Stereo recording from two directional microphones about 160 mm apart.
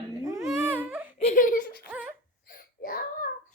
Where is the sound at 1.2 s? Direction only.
55° left (ahead or behind).